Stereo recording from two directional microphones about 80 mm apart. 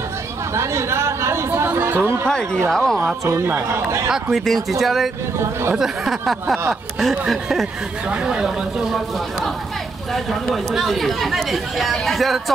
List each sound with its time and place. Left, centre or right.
0.6 s speech: right
2.2 s speech: centre
4.1 s speech: centre
5.4 s speech: right
5.8 s speech: centre
8.1 s speech: centre
10.1 s speech: centre